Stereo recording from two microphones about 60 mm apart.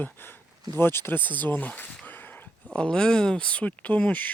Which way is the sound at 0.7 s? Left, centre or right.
Left.